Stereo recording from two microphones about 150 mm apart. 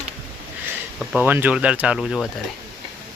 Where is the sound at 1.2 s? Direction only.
10° right (ahead or behind).